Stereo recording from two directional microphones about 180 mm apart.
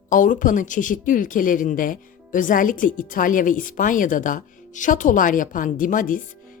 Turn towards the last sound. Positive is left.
turn(degrees=50)  # may be behind; listen again after turning